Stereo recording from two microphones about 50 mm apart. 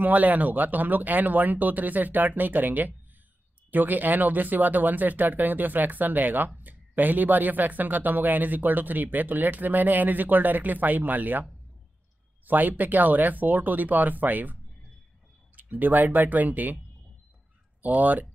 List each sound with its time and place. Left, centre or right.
0.0 s speech: right
12.4 s speech: right
17.8 s speech: right